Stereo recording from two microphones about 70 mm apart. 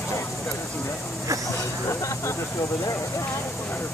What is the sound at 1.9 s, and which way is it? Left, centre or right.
Speech, left.